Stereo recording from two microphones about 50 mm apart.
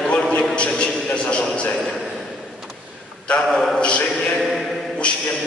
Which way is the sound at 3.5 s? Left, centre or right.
Centre.